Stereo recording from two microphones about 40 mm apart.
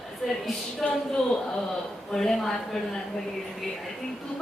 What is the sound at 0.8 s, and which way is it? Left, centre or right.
Speech, centre.